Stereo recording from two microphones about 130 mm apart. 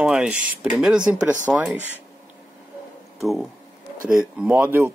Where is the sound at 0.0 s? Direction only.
5° right (ahead or behind).